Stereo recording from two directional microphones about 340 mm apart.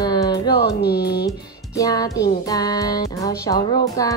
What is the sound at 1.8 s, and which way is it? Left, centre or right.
Music, centre.